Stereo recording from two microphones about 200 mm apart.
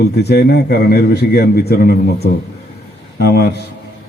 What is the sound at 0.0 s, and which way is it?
A man's voice, 55° left (ahead or behind).